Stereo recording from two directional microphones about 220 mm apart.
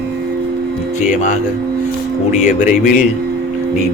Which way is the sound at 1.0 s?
35° left (ahead or behind).